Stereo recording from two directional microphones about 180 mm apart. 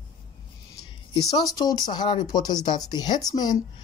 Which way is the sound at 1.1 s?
20° left (ahead or behind).